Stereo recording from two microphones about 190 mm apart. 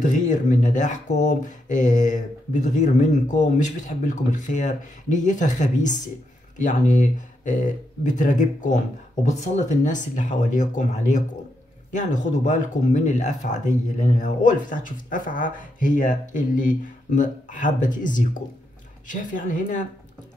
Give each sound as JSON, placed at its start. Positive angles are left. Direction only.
{"t": 0.0, "sound": "speech", "side_deg": 40}